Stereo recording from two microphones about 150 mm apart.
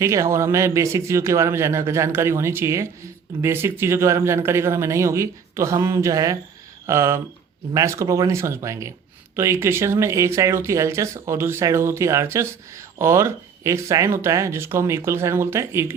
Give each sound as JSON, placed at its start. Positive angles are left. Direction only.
{"t": 0.0, "sound": "a man's voice", "side_deg": -20}